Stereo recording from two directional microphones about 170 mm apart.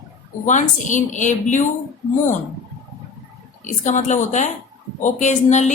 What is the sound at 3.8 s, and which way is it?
A woman's voice, 45° left (ahead or behind).